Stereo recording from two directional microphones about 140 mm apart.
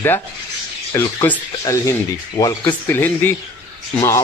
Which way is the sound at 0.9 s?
15° left (ahead or behind).